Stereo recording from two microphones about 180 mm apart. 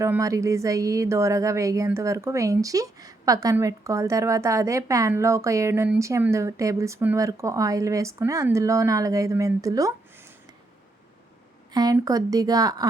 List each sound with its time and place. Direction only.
0.0 s speech: 15° right (ahead or behind)
11.7 s a woman's voice: 20° right (ahead or behind)